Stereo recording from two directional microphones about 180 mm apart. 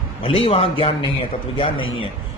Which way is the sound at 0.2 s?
30° left (ahead or behind).